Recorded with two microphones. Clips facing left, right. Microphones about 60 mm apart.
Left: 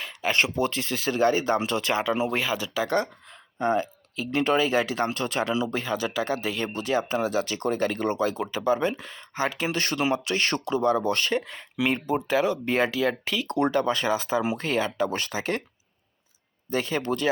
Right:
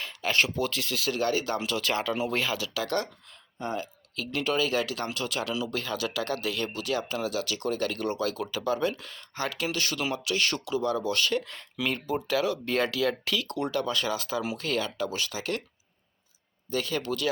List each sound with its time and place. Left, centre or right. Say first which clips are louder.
0.0 s speech: left 2 dB; centre
1.9 s speech: left 3 dB; centre
3.6 s speech: left 8 dB; left
4.1 s speech: left 5 dB; left
11.4 s speech: left 5 dB; centre
16.6 s speech: left 3 dB; left